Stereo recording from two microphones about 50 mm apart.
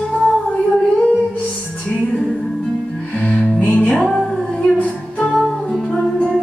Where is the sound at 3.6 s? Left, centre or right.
Left.